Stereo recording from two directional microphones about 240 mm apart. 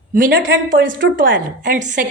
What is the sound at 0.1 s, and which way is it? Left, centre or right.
A woman's voice, right.